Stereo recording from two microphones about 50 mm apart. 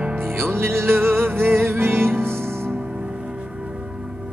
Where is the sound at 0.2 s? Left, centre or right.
Right.